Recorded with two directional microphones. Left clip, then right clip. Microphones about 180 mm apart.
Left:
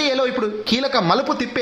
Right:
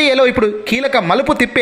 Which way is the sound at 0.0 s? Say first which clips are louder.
Right 8 dB; 20° right (ahead or behind).